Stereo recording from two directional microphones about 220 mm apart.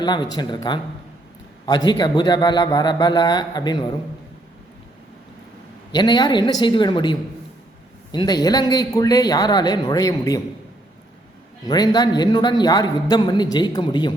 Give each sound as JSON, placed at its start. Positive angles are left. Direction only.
{"t": 0.0, "sound": "a man's voice", "side_deg": 20}
{"t": 5.9, "sound": "a man's voice", "side_deg": 20}
{"t": 11.6, "sound": "a man's voice", "side_deg": 20}